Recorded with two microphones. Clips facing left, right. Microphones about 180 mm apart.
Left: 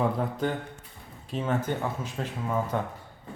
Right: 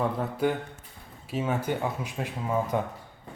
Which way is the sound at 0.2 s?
10° right (ahead or behind).